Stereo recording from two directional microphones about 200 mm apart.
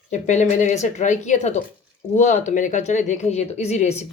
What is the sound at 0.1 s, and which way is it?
A woman's voice, 35° left (ahead or behind).